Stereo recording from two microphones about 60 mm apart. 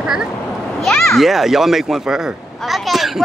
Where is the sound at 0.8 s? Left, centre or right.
Centre.